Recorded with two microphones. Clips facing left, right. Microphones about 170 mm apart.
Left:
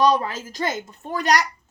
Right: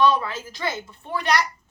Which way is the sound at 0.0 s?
40° left (ahead or behind).